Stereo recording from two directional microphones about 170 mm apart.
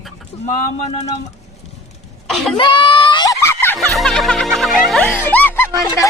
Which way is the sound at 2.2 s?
5° left (ahead or behind).